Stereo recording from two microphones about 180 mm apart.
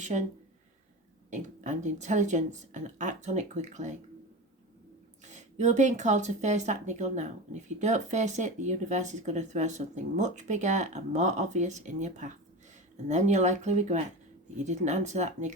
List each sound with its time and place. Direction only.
0.0 s speech: 40° right (ahead or behind)
1.3 s speech: 40° right (ahead or behind)
5.2 s speech: 40° right (ahead or behind)